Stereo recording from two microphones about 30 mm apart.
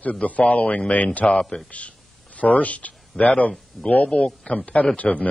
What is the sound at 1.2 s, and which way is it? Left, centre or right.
A man's voice, left.